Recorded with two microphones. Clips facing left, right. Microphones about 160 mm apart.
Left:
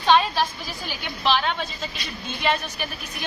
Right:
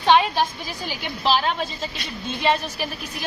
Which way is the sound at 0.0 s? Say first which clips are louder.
Right 2 dB; 15° right (ahead or behind).